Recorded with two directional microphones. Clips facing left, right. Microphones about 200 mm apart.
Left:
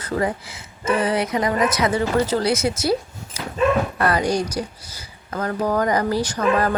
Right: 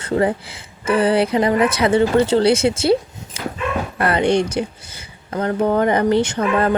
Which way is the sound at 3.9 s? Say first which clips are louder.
Right 3 dB; 25° right (ahead or behind).